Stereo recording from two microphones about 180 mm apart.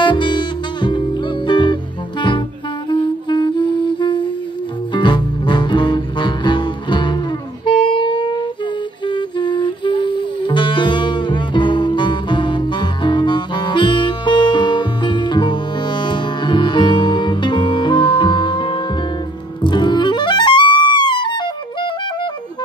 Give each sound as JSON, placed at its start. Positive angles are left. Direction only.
{"t": 0.0, "sound": "music", "side_deg": 25}